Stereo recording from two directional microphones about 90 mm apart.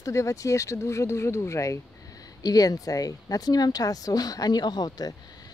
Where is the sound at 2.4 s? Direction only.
45° left (ahead or behind).